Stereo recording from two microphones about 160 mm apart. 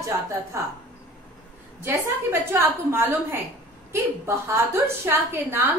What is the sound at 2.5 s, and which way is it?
A woman's voice, 15° right (ahead or behind).